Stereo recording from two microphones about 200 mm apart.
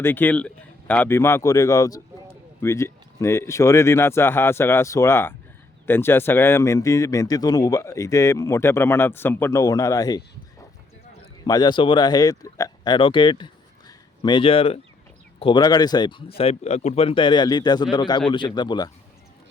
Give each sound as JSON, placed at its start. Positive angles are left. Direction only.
{"t": 0.0, "sound": "a man's voice", "side_deg": 10}
{"t": 11.4, "sound": "speech", "side_deg": 20}